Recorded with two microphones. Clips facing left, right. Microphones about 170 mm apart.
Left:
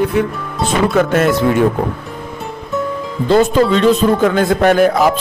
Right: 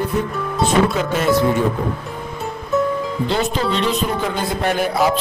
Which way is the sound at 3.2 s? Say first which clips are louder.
Left 11 dB; 50° left (ahead or behind).